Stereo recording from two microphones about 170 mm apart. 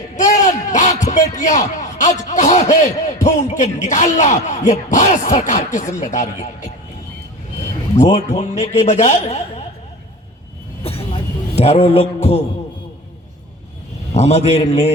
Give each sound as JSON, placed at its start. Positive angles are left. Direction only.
{"t": 0.2, "sound": "a man's voice", "side_deg": 45}
{"t": 7.9, "sound": "a man's voice", "side_deg": 40}
{"t": 10.8, "sound": "a sound", "side_deg": 35}
{"t": 14.1, "sound": "a man's voice", "side_deg": 40}